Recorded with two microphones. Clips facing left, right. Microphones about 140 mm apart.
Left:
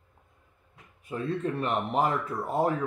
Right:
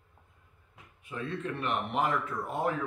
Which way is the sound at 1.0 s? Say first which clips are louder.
Left 5 dB; 35° left (ahead or behind).